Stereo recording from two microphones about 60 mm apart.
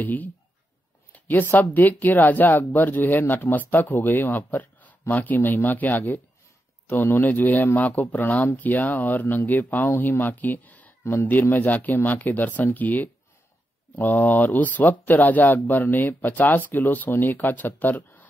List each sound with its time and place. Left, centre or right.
0.0 s speech: left